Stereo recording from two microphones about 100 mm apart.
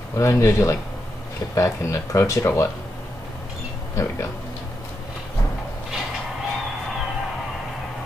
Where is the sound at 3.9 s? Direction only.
30° left (ahead or behind).